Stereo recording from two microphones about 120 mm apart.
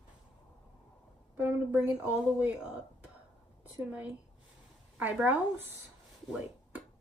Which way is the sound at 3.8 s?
15° right (ahead or behind).